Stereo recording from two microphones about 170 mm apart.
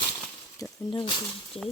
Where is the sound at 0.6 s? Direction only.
30° left (ahead or behind).